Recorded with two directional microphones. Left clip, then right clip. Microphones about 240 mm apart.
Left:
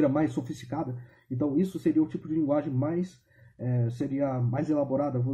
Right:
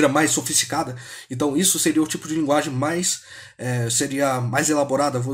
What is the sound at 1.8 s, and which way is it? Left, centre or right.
Speech, centre.